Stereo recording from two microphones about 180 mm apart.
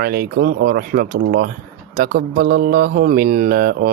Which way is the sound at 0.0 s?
55° right (ahead or behind).